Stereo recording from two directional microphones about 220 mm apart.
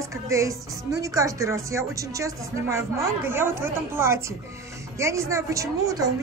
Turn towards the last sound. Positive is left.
turn(degrees=-15)  # may be behind; listen again after turning